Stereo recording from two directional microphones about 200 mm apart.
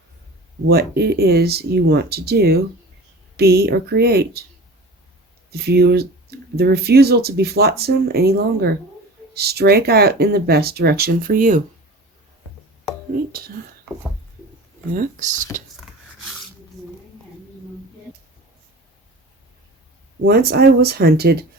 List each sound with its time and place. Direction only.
0.7 s speech: 55° right (ahead or behind)
5.5 s speech: 50° right (ahead or behind)
20.2 s speech: 50° right (ahead or behind)